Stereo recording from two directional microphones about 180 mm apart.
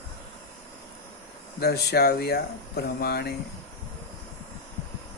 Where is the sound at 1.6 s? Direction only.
60° left (ahead or behind).